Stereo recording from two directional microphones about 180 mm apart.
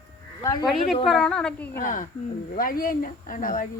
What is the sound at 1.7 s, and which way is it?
Speech, 45° left (ahead or behind).